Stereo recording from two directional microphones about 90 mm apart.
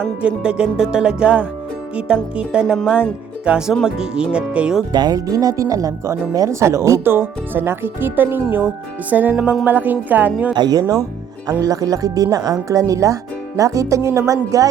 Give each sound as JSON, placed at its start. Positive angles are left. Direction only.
{"t": 0.2, "sound": "music", "side_deg": -10}
{"t": 2.8, "sound": "speech", "side_deg": -10}
{"t": 3.8, "sound": "music", "side_deg": -10}
{"t": 4.9, "sound": "speech", "side_deg": -50}
{"t": 10.5, "sound": "speech", "side_deg": -50}